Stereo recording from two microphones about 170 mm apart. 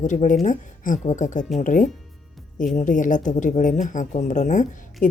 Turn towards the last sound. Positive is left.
turn(degrees=45)  # may be behind; listen again after turning